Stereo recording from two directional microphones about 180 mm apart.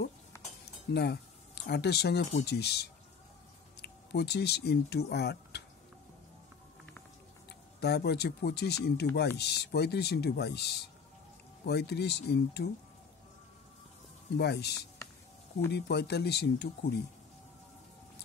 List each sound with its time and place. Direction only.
0.9 s speech: 65° left (ahead or behind)
7.4 s speech: 65° left (ahead or behind)
14.4 s speech: 65° left (ahead or behind)
15.7 s speech: 65° left (ahead or behind)